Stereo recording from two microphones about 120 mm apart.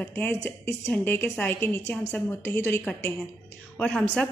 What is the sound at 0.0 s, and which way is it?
A woman's voice, 15° left (ahead or behind).